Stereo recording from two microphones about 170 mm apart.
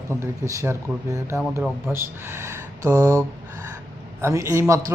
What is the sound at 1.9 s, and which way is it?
Speech, 15° right (ahead or behind).